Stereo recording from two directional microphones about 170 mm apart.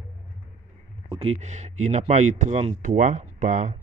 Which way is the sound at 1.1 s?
35° right (ahead or behind).